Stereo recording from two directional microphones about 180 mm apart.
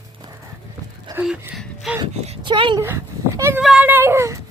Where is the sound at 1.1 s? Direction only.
10° right (ahead or behind).